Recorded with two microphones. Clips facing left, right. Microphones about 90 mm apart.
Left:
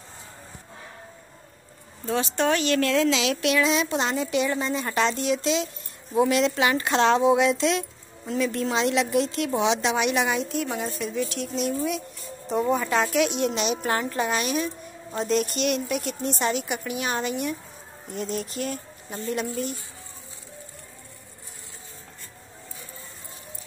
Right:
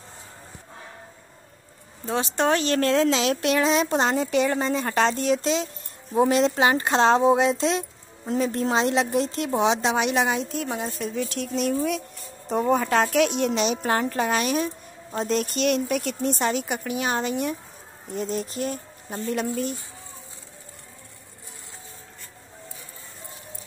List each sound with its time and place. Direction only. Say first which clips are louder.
2.0 s speech: right 1 dB; 25° right (ahead or behind)
19.1 s speech: right 2 dB; 40° right (ahead or behind)